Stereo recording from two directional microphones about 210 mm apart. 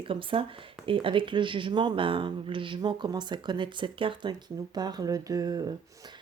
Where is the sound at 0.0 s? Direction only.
25° right (ahead or behind).